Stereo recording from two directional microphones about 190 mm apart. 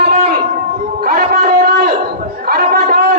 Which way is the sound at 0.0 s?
50° right (ahead or behind).